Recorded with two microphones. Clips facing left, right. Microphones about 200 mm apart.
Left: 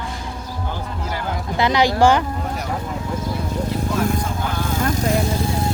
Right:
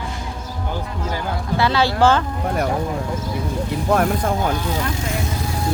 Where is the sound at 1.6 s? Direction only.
15° left (ahead or behind).